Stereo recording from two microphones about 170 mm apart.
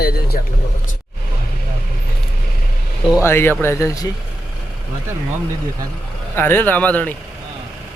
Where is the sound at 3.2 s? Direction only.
15° left (ahead or behind).